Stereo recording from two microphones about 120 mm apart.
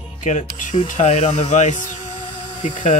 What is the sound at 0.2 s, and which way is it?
Speech, 85° left.